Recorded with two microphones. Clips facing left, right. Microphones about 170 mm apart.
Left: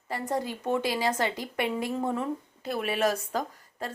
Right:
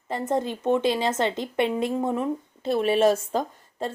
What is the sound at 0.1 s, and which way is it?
Speech, 20° right (ahead or behind).